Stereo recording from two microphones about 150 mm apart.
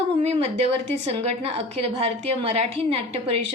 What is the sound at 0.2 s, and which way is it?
A woman's voice, 45° right (ahead or behind).